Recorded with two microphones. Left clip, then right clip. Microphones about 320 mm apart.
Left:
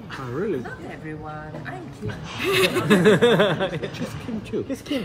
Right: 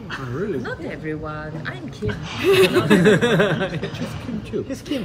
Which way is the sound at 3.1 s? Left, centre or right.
Left.